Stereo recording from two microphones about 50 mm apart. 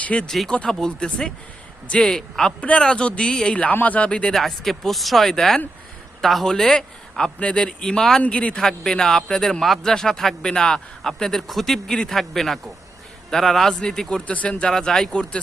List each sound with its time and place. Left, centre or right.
0.0 s speech: left
0.3 s a man's voice: centre
8.2 s speech: left
8.6 s a man's voice: centre
14.3 s speech: left
14.6 s a man's voice: centre